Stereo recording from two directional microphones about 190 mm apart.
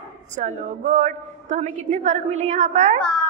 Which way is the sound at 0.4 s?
35° right (ahead or behind).